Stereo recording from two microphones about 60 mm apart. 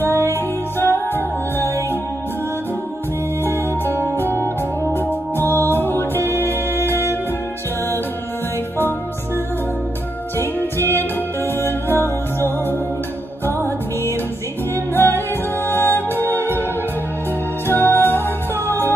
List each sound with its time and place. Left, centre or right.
0.0 s music: left
4.2 s music: left
10.3 s music: left
15.0 s music: left
17.6 s music: left